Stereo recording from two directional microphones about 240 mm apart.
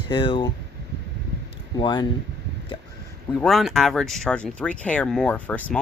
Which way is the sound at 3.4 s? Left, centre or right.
Centre.